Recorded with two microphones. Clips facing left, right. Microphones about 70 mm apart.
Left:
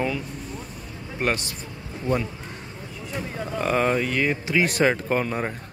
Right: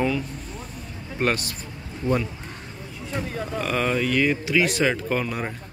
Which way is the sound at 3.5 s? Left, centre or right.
Left.